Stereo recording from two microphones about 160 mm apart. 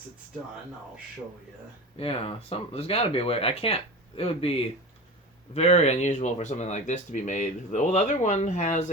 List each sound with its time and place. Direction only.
2.0 s speech: 35° left (ahead or behind)